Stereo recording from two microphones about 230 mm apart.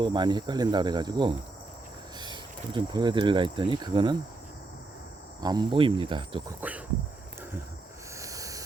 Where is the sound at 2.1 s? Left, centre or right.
Centre.